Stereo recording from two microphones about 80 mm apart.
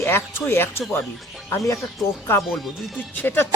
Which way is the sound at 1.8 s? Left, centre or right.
Centre.